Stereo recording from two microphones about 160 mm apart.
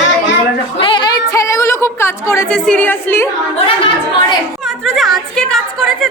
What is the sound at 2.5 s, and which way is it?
Speech, 5° left (ahead or behind).